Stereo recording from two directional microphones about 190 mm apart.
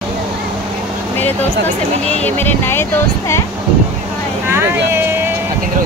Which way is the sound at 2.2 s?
10° left (ahead or behind).